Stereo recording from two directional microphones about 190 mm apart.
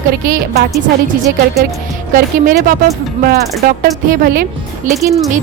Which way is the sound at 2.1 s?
45° right (ahead or behind).